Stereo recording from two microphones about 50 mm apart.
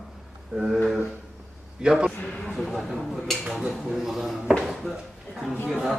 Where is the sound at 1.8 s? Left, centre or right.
Centre.